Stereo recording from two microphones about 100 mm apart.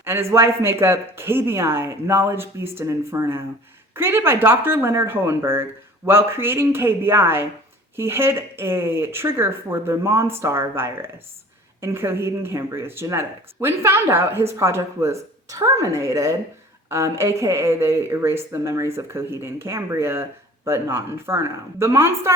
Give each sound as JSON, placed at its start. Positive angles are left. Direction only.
{"t": 0.0, "sound": "speech", "side_deg": -25}